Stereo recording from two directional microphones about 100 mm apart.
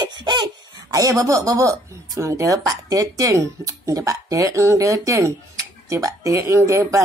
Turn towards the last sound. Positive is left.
turn(degrees=-30)  # may be behind; listen again after turning